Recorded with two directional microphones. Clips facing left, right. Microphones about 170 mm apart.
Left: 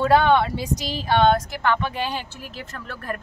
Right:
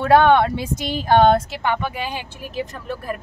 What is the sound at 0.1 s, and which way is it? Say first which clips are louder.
Speech: right 6 dB; 60° right (ahead or behind).